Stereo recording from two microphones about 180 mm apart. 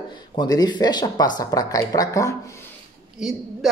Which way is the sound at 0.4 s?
25° left (ahead or behind).